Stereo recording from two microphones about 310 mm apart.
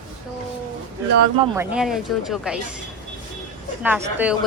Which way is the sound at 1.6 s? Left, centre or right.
Centre.